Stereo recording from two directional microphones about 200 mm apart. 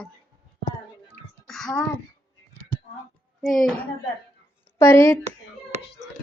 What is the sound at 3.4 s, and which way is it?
Speech, centre (ahead or behind).